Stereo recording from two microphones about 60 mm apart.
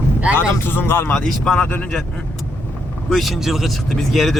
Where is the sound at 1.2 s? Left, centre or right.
Centre.